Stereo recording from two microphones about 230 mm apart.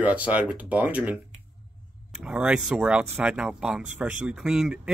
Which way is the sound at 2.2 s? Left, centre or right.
Centre.